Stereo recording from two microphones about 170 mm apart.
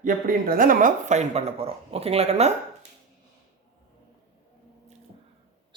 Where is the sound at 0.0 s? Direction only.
55° right (ahead or behind); by 2.5 s 40° right (ahead or behind).